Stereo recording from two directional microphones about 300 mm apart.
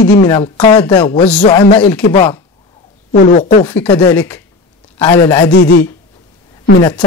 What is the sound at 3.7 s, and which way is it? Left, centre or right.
A man's voice, centre.